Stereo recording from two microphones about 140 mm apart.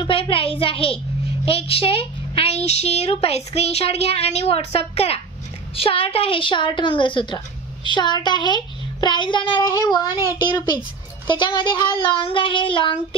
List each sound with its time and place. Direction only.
0.0 s a woman's voice: 40° left (ahead or behind)
9.6 s child singing: 25° left (ahead or behind)
11.2 s a woman's voice: 35° left (ahead or behind)